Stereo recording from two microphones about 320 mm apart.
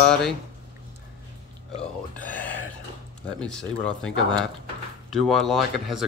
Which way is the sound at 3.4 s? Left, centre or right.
Centre.